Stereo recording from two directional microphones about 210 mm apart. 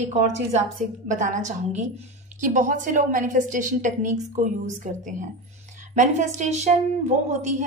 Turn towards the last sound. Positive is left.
turn(degrees=-35)  # may be behind; listen again after turning